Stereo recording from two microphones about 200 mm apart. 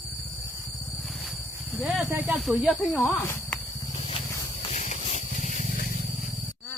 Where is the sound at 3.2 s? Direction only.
10° left (ahead or behind).